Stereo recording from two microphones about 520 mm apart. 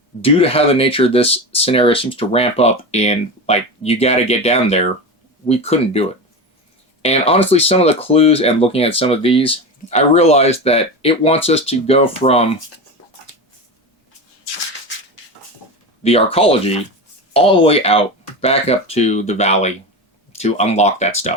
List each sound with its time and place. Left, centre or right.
0.2 s speech: centre
16.0 s speech: centre